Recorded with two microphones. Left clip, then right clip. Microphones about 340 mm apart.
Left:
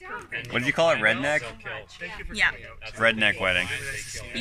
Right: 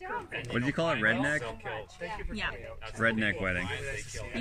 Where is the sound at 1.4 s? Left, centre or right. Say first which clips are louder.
Left 2 dB; right.